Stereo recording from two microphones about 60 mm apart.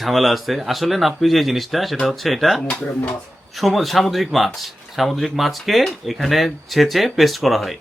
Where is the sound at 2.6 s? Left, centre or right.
Centre.